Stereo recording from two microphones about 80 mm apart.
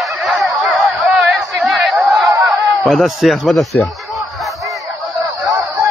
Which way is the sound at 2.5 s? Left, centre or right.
Centre.